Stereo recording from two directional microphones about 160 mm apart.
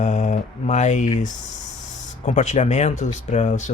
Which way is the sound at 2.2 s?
50° left (ahead or behind).